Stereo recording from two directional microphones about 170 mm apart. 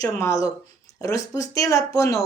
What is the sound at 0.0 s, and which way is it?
A woman's voice, 20° left (ahead or behind).